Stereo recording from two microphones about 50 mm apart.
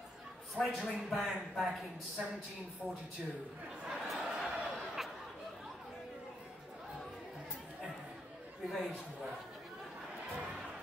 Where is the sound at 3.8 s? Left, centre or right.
Centre.